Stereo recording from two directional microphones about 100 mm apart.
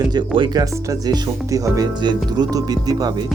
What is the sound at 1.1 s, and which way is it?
Speech, 35° right (ahead or behind).